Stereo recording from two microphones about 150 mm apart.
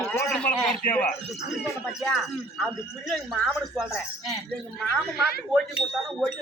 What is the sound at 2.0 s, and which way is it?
Speech, centre (ahead or behind).